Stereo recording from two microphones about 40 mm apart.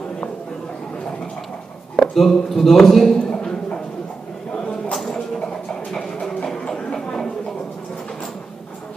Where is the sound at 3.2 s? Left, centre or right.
Left.